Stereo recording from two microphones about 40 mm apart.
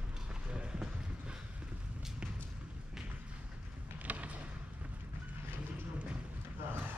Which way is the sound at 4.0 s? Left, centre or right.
Right.